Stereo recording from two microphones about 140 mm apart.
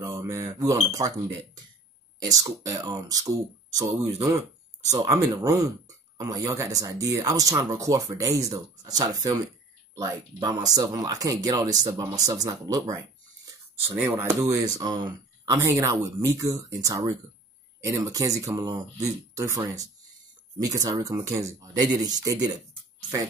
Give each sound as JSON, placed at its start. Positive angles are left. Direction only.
{"t": 0.0, "sound": "speech", "side_deg": -20}